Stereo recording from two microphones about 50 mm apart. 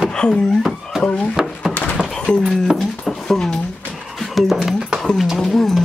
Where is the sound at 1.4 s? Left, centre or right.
Centre.